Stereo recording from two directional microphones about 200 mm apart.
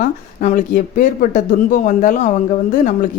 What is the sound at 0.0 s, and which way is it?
A man's voice, 40° left (ahead or behind).